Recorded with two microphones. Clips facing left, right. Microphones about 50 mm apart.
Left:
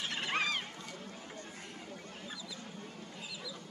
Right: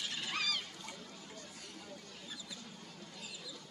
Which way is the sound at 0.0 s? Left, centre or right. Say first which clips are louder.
Left 4 dB; left.